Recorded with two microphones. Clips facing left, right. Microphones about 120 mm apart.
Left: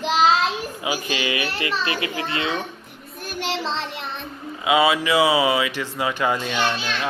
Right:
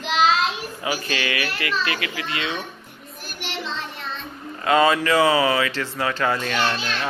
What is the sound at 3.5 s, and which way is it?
Child singing, 90° left.